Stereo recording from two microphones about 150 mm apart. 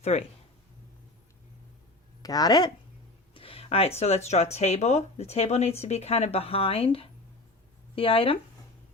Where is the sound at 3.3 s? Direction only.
40° left (ahead or behind).